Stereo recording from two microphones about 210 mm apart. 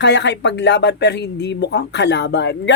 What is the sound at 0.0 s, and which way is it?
Speech, 55° left (ahead or behind).